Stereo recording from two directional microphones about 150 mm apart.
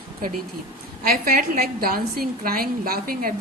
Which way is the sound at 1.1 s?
75° right (ahead or behind).